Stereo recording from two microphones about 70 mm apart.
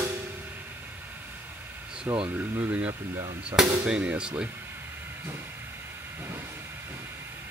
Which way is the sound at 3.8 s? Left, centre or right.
Centre.